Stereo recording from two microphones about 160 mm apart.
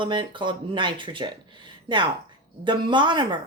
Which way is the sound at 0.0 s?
30° right (ahead or behind).